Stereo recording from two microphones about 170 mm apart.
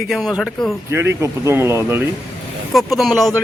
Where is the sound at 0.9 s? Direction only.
15° right (ahead or behind).